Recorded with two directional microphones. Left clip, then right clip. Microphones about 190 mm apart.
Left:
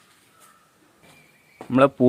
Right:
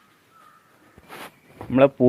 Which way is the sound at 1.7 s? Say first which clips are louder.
Right 1 dB; 15° left (ahead or behind).